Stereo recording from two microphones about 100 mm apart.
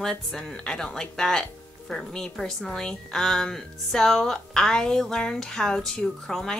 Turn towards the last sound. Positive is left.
turn(degrees=5)  # may be behind; listen again after turning